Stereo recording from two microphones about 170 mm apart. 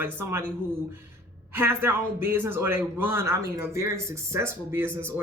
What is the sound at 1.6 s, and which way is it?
Speech, 15° right (ahead or behind).